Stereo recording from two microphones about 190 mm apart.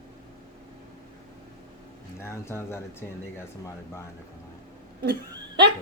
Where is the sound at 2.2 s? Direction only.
15° left (ahead or behind).